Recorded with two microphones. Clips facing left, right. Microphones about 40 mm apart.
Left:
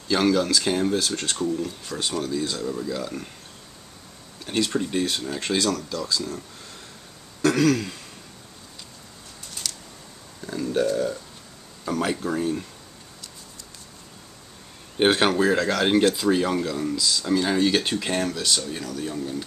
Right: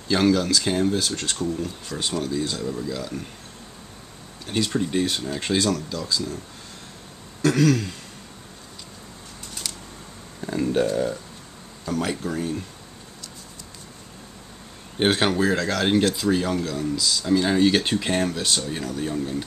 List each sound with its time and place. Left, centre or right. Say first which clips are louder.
0.1 s speech: right 1 dB; centre
4.5 s speech: even; centre
7.4 s speech: even; centre
9.6 s a sound: left 1 dB; centre
10.4 s speech: right 2 dB; right
11.8 s speech: left 1 dB; centre
15.0 s speech: left 1 dB; centre